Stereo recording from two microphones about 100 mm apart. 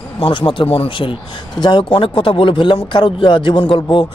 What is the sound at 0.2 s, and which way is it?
Speech, 60° left (ahead or behind).